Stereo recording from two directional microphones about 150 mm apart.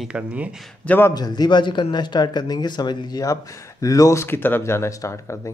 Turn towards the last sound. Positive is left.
turn(degrees=20)  # may be behind; listen again after turning